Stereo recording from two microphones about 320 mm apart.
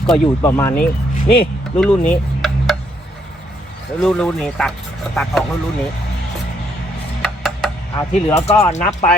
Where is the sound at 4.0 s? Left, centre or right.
Centre.